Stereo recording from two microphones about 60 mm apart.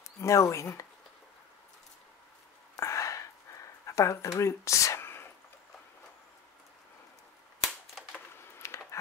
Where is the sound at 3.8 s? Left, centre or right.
Left.